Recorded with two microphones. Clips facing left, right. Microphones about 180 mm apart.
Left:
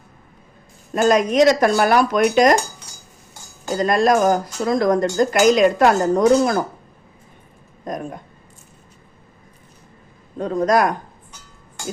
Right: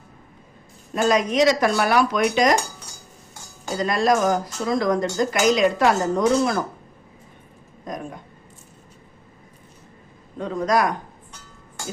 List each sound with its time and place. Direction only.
1.0 s speech: 50° left (ahead or behind)
3.8 s speech: 50° left (ahead or behind)
10.3 s a man's voice: 40° left (ahead or behind)